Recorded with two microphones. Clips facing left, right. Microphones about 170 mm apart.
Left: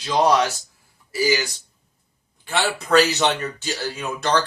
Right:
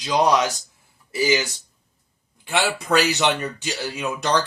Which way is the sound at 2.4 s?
10° right (ahead or behind).